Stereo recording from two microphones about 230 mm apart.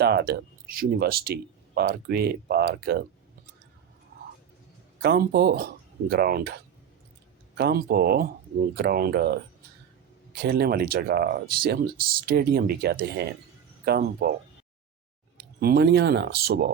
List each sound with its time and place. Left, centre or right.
0.0 s speech: right
5.0 s speech: right
15.6 s speech: right